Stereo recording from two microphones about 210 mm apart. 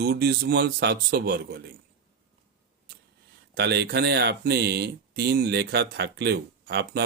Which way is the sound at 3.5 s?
50° right (ahead or behind).